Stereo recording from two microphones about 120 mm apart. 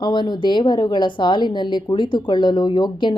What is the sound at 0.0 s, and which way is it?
Speech, 40° left (ahead or behind).